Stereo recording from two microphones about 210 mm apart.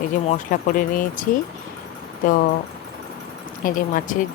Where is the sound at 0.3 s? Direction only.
40° left (ahead or behind).